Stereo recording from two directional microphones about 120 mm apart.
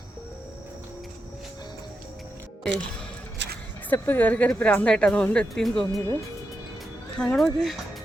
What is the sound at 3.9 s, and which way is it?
A woman's voice, 15° left (ahead or behind).